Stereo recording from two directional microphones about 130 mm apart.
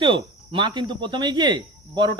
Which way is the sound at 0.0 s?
40° right (ahead or behind).